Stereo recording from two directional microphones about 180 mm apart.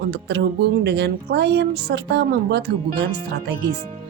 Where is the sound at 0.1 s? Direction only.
70° right (ahead or behind).